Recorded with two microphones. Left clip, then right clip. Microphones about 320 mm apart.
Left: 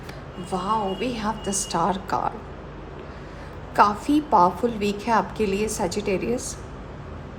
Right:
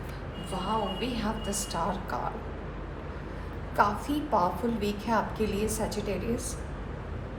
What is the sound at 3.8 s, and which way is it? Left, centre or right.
A woman's voice, left.